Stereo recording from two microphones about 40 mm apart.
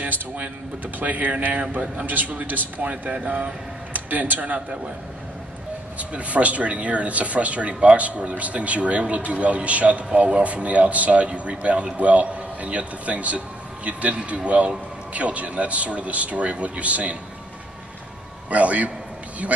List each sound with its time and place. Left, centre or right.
0.0 s a man's voice: right
2.8 s speech: right
5.9 s speech: right
18.5 s speech: right